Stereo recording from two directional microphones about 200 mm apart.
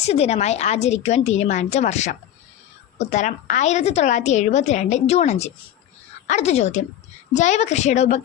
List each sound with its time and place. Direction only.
0.0 s a woman's voice: 30° left (ahead or behind)